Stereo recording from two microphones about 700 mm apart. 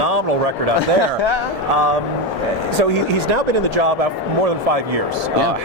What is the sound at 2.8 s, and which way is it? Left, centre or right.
Speech, right.